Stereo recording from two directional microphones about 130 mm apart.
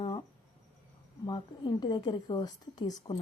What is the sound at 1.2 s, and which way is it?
A woman's voice, 30° left (ahead or behind).